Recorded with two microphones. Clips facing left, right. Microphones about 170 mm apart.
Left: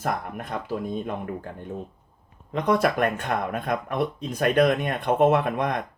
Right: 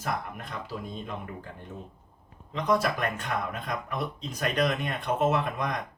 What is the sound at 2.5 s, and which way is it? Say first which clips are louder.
Speech: left 4 dB; 55° left (ahead or behind).